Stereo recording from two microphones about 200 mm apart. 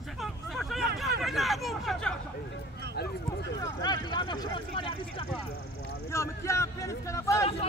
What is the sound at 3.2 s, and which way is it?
Vehicle, 20° left (ahead or behind).